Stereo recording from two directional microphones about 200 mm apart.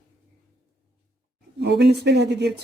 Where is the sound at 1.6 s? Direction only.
55° right (ahead or behind).